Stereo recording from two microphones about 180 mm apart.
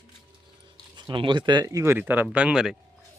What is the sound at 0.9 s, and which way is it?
Speech, 25° right (ahead or behind).